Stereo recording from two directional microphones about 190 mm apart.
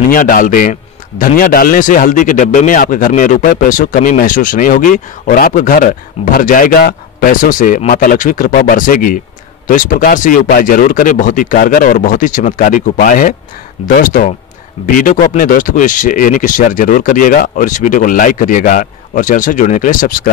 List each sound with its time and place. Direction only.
0.1 s a man's voice: 45° left (ahead or behind)